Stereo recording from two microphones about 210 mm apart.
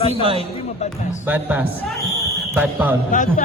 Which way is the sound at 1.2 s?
10° right (ahead or behind).